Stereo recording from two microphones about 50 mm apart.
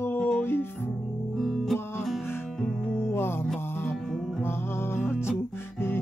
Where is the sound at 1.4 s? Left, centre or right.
Centre.